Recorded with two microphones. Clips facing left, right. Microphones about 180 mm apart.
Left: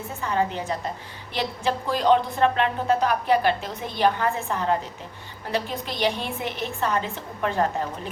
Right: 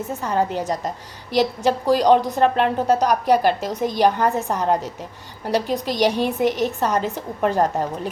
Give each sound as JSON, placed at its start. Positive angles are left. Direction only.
{"t": 0.2, "sound": "a woman's voice", "side_deg": -40}